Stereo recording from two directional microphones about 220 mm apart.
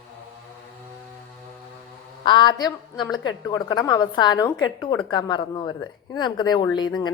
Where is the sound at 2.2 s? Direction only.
20° left (ahead or behind).